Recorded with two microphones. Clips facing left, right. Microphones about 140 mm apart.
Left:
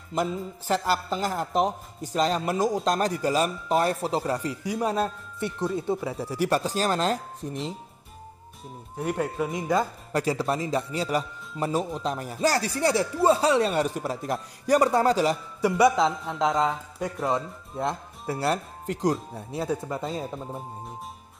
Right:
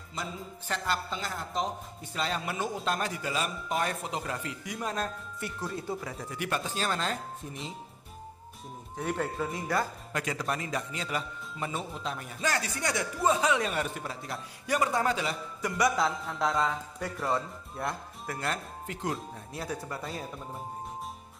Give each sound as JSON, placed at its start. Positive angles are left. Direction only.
{"t": 0.1, "sound": "speech", "side_deg": 45}
{"t": 2.0, "sound": "a man's voice", "side_deg": 40}
{"t": 8.9, "sound": "speech", "side_deg": 10}
{"t": 10.1, "sound": "a man's voice", "side_deg": 30}
{"t": 19.6, "sound": "speech", "side_deg": 25}